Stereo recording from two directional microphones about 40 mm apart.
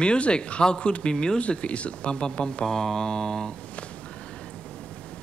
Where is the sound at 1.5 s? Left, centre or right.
Left.